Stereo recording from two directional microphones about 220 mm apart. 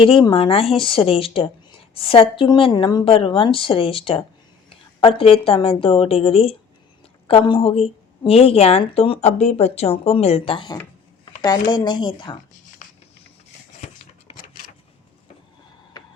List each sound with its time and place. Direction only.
0.0 s a woman's voice: 25° left (ahead or behind)